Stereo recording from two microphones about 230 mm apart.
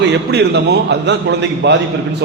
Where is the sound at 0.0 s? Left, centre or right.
Right.